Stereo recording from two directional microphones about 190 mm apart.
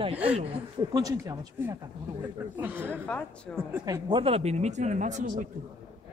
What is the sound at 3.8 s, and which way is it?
Speech, 20° right (ahead or behind).